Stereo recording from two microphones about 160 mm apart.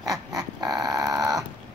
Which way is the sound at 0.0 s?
20° right (ahead or behind).